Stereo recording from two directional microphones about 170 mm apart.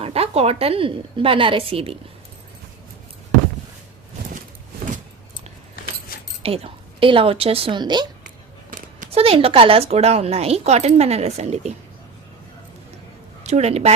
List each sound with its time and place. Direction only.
0.0 s a woman's voice: 35° right (ahead or behind)
6.4 s a woman's voice: 35° right (ahead or behind)
13.4 s a woman's voice: 40° right (ahead or behind)